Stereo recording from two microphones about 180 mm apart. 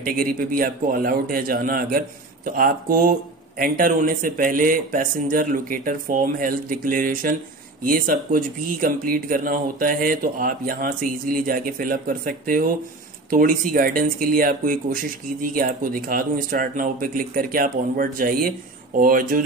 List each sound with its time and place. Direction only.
0.0 s a man's voice: 50° right (ahead or behind)